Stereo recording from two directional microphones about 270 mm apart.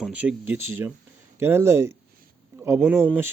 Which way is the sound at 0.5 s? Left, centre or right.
Right.